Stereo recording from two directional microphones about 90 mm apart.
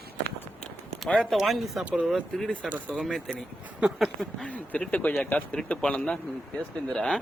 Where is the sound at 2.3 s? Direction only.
5° left (ahead or behind).